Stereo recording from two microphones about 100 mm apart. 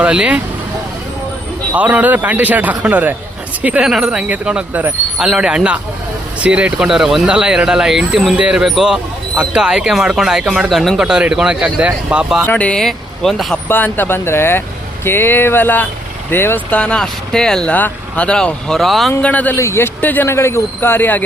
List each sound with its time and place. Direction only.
0.0 s speech: 10° right (ahead or behind)
1.7 s speech: 15° right (ahead or behind)
12.5 s speech: 15° left (ahead or behind)
13.7 s speech: 20° left (ahead or behind); by 19.1 s centre (ahead or behind)
19.2 s speech: 15° left (ahead or behind)
19.5 s speech: 30° left (ahead or behind)